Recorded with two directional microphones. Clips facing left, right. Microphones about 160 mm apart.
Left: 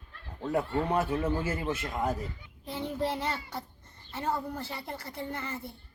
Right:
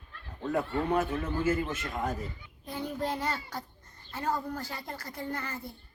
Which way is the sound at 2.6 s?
25° left (ahead or behind).